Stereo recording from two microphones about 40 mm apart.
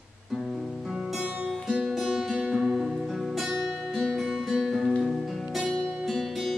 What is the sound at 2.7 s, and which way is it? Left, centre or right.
Music, centre.